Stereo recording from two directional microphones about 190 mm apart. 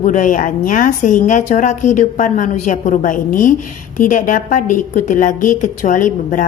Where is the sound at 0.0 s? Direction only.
40° left (ahead or behind).